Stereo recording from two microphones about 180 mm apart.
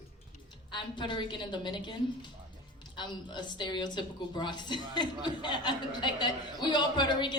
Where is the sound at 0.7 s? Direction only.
25° left (ahead or behind).